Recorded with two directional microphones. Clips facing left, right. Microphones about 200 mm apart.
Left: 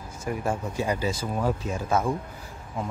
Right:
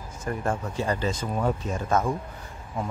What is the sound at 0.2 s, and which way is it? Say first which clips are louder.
Speech: even; 10° left (ahead or behind).